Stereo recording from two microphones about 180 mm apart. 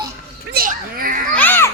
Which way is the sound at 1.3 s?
10° left (ahead or behind).